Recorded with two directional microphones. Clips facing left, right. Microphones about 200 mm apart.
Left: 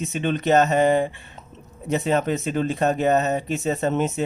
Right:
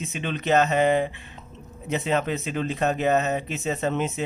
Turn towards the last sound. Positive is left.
turn(degrees=40)  # may be behind; listen again after turning